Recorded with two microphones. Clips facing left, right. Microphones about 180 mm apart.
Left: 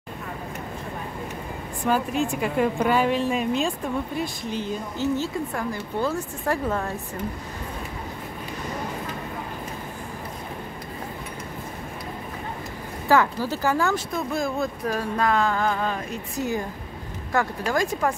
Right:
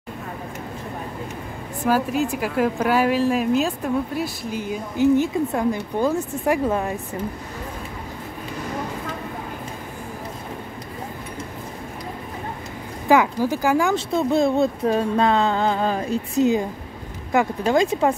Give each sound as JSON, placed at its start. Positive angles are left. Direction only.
{"t": 1.9, "sound": "a woman's voice", "side_deg": -5}
{"t": 13.1, "sound": "speech", "side_deg": -15}
{"t": 13.9, "sound": "speech", "side_deg": -25}